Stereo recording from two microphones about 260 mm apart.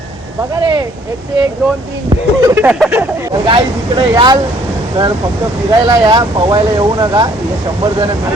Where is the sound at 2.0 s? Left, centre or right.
Centre.